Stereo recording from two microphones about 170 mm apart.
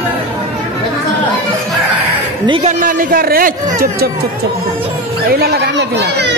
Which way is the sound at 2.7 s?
55° right (ahead or behind).